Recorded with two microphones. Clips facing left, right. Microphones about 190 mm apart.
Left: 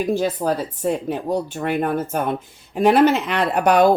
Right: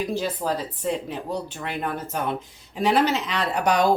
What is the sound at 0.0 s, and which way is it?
Speech, 50° left (ahead or behind).